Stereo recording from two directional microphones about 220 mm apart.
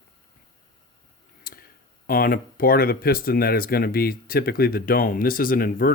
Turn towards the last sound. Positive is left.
turn(degrees=40)  # may be behind; listen again after turning